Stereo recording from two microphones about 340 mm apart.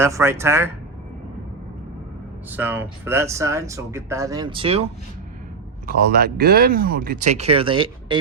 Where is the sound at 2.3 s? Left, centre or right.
Centre.